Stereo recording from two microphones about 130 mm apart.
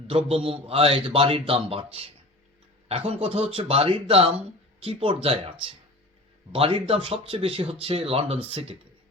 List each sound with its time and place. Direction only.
0.3 s speech: 45° right (ahead or behind)